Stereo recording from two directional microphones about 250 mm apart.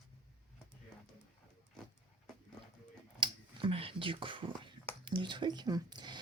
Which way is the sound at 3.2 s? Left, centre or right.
Right.